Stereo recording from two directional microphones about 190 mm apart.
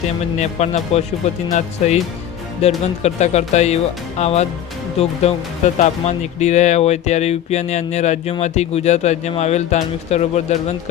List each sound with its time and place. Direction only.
0.3 s speech: 35° left (ahead or behind)